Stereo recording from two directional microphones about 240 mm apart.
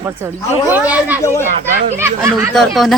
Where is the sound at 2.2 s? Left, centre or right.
Centre.